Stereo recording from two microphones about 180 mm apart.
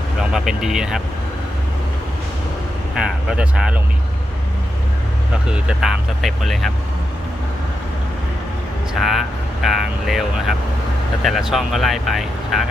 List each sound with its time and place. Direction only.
0.2 s speech: centre (ahead or behind)
3.0 s speech: 5° right (ahead or behind)
5.5 s speech: 5° right (ahead or behind)
9.0 s speech: centre (ahead or behind)